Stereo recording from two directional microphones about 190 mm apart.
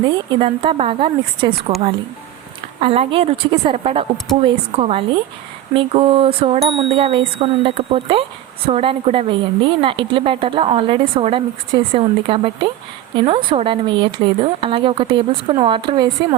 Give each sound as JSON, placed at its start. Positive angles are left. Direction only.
{"t": 0.1, "sound": "a woman's voice", "side_deg": -25}
{"t": 2.8, "sound": "a woman's voice", "side_deg": -30}